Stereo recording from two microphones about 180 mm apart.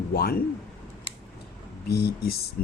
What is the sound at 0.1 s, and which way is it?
Speech, 55° left (ahead or behind).